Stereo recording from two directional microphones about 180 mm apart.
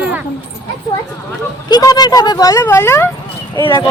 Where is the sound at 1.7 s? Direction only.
20° left (ahead or behind).